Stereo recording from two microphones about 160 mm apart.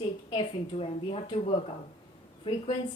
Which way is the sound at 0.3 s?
35° left (ahead or behind).